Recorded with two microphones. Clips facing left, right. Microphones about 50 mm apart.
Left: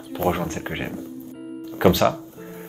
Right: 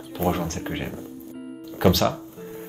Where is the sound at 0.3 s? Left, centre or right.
Centre.